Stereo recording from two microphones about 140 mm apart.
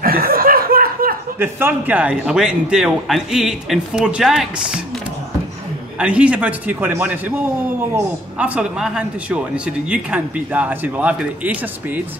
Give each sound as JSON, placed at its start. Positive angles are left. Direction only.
{"t": 0.0, "sound": "chuckle", "side_deg": -90}
{"t": 1.4, "sound": "a man's voice", "side_deg": -15}
{"t": 5.9, "sound": "a man's voice", "side_deg": -10}